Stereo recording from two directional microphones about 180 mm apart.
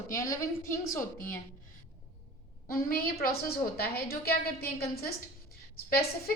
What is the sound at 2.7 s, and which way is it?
A woman's voice, 55° left (ahead or behind).